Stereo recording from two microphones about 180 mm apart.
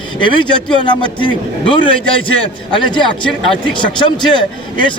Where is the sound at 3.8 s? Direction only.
25° left (ahead or behind).